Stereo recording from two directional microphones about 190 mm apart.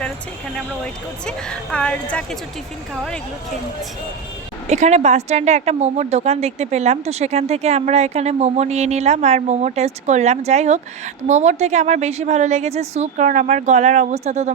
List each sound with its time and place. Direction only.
1.2 s a woman's voice: 5° left (ahead or behind)
4.7 s a woman's voice: 35° right (ahead or behind)